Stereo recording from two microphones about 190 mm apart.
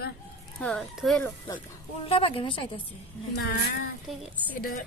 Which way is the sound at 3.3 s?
60° left (ahead or behind).